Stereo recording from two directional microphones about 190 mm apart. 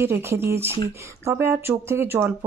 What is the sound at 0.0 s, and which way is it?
Speech, 15° right (ahead or behind).